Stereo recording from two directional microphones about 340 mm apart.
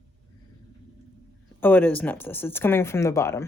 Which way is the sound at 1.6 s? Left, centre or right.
Centre.